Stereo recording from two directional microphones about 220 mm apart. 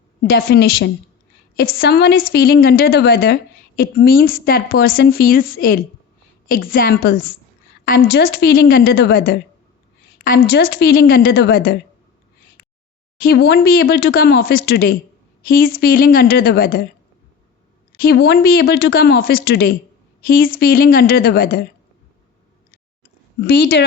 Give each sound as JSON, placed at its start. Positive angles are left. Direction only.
{"t": 0.2, "sound": "a woman's voice", "side_deg": 45}
{"t": 13.1, "sound": "a woman's voice", "side_deg": 45}
{"t": 17.9, "sound": "a woman's voice", "side_deg": 45}
{"t": 23.4, "sound": "a woman's voice", "side_deg": 50}